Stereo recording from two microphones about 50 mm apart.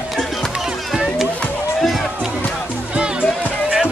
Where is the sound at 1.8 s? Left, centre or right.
Centre.